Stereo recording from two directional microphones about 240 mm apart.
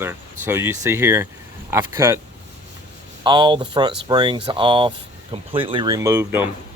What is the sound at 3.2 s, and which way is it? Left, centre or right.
Speech, centre.